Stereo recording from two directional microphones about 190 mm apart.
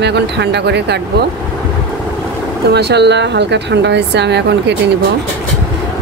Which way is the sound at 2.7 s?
60° right (ahead or behind).